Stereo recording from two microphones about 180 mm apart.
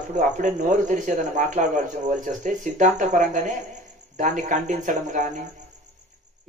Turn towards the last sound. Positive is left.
turn(degrees=-45)  # may be behind; listen again after turning